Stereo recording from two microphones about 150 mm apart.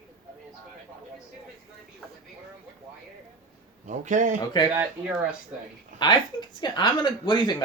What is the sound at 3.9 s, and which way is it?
Speech, 55° right (ahead or behind).